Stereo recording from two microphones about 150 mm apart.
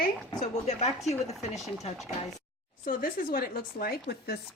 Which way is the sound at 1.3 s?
Centre (ahead or behind).